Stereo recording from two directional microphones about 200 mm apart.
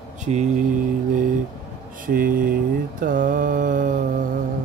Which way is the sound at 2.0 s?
45° right (ahead or behind).